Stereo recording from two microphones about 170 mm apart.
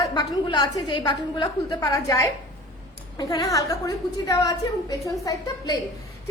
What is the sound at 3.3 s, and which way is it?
A woman's voice, 20° left (ahead or behind).